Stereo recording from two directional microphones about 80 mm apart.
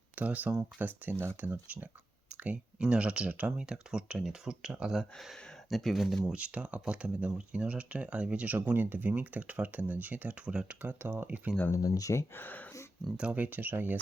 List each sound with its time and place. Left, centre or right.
0.2 s speech: centre
6.3 s speech: centre
11.0 s speech: right
11.7 s speech: left
12.3 s speech: left
13.1 s speech: centre